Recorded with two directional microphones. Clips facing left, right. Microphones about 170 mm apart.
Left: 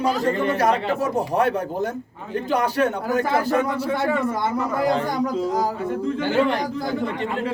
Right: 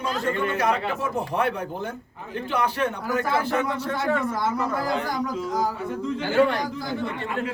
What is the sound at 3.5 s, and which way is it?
Speech, 5° left (ahead or behind).